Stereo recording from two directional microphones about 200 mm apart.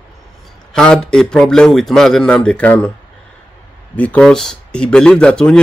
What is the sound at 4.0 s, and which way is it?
Speech, 5° left (ahead or behind).